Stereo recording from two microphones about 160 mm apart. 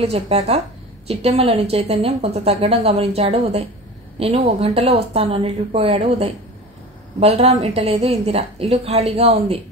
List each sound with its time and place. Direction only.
0.0 s a woman's voice: 40° right (ahead or behind)